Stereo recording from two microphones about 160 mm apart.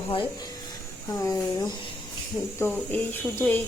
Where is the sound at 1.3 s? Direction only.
25° left (ahead or behind).